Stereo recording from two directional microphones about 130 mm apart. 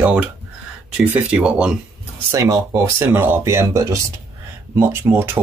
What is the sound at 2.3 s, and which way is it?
Speech, 25° right (ahead or behind).